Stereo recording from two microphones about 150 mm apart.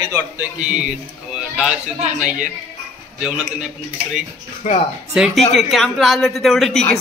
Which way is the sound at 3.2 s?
5° right (ahead or behind).